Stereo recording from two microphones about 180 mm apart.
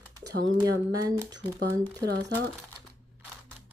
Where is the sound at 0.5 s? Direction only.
20° right (ahead or behind).